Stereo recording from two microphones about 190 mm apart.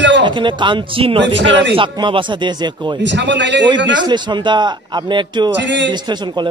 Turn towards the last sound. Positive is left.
turn(degrees=-25)  # may be behind; listen again after turning